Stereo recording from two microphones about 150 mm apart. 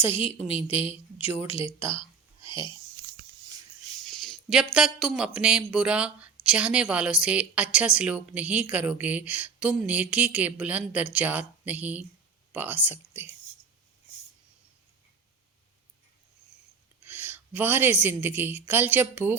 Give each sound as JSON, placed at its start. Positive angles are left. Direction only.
{"t": 0.1, "sound": "speech", "side_deg": 40}
{"t": 1.2, "sound": "speech", "side_deg": -15}
{"t": 2.0, "sound": "a sound", "side_deg": 35}
{"t": 4.0, "sound": "speech", "side_deg": 0}
{"t": 17.1, "sound": "a woman's voice", "side_deg": -15}